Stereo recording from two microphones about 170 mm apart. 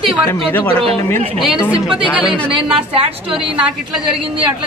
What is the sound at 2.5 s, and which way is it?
A woman's voice, 30° right (ahead or behind).